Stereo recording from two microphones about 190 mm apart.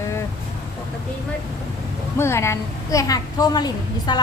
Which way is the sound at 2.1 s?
15° left (ahead or behind).